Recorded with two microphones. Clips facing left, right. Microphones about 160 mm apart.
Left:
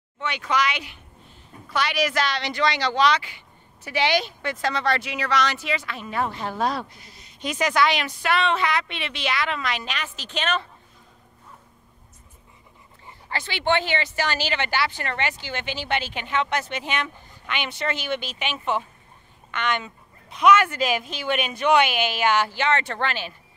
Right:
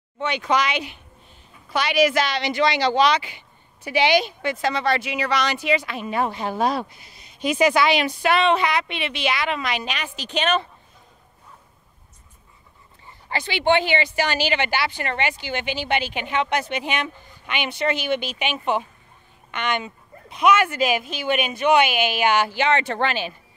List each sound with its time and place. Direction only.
0.2 s speech: 20° right (ahead or behind)
13.3 s speech: 15° right (ahead or behind)